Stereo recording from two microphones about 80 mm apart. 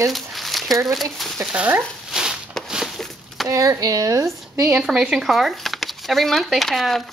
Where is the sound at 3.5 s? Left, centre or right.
Right.